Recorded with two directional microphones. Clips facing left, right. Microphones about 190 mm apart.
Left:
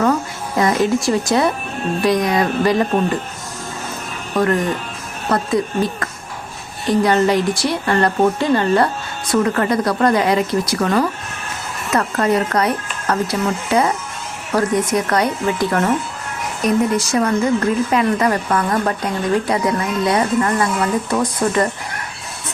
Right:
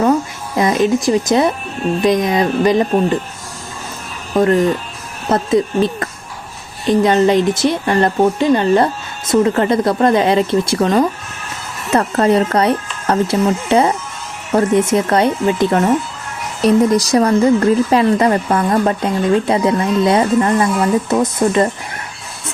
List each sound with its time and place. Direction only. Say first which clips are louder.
0.0 s music: right 3 dB; 20° right (ahead or behind)
2.0 s a woman's voice: right 2 dB; 20° right (ahead or behind)
4.4 s a woman's voice: right 5 dB; 25° right (ahead or behind)
16.6 s a woman's voice: right 5 dB; 35° right (ahead or behind)